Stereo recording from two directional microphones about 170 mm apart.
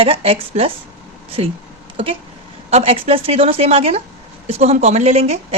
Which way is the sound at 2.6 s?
40° right (ahead or behind).